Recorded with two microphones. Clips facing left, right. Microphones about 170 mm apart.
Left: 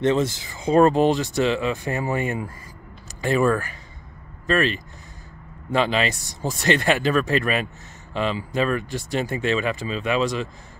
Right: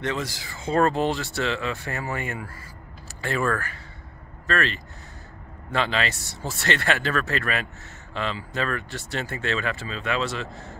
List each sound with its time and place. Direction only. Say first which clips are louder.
0.0 s speech: left 8 dB; 25° left (ahead or behind)